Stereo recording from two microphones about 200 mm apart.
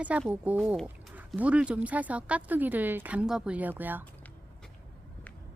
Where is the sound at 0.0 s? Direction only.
5° right (ahead or behind).